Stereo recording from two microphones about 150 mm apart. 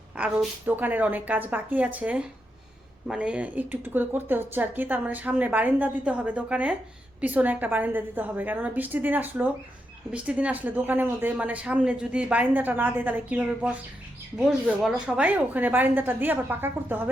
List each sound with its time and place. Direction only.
0.2 s speech: 10° right (ahead or behind)
14.8 s speech: 5° right (ahead or behind)